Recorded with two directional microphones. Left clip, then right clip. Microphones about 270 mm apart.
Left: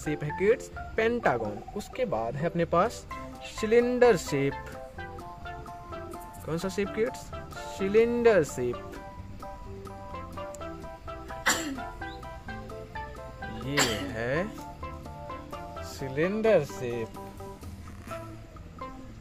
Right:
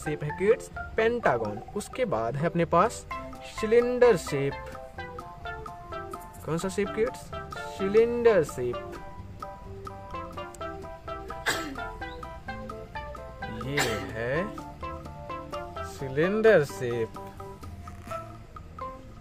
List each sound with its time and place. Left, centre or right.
0.0 s speech: centre
1.8 s speech: centre
3.5 s music: centre
16.1 s speech: centre